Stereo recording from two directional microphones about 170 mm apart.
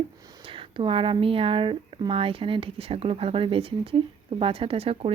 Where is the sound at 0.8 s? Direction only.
30° right (ahead or behind).